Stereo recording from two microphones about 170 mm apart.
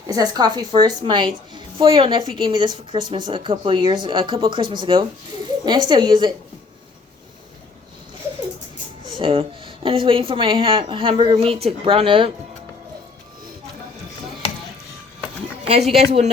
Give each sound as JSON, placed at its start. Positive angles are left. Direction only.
{"t": 0.1, "sound": "a woman's voice", "side_deg": -25}
{"t": 9.1, "sound": "speech", "side_deg": -30}
{"t": 15.6, "sound": "speech", "side_deg": -35}